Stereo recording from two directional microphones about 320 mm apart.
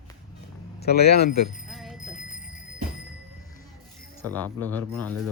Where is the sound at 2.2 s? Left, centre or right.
Left.